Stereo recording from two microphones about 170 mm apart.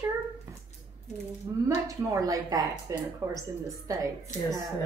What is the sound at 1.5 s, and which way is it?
Speech, 20° right (ahead or behind).